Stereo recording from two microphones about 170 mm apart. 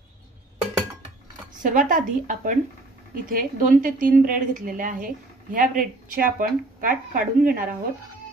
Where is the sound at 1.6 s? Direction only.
50° right (ahead or behind).